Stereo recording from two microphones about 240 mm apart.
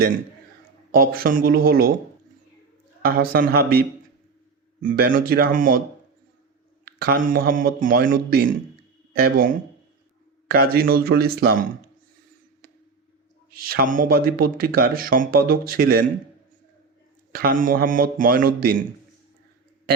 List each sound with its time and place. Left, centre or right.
0.9 s speech: right
3.0 s speech: right
7.0 s speech: right
13.7 s speech: right
17.3 s speech: right